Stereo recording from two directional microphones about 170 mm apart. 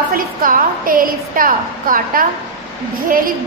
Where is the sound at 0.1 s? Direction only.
55° right (ahead or behind).